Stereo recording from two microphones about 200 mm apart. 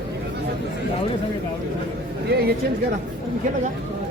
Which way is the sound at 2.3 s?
50° right (ahead or behind).